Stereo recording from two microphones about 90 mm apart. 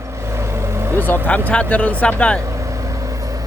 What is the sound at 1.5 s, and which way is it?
Speech, 15° left (ahead or behind).